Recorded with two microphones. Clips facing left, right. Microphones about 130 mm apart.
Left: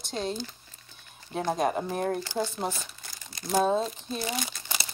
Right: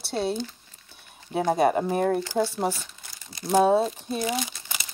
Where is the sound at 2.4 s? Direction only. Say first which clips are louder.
Right 5 dB; 25° right (ahead or behind).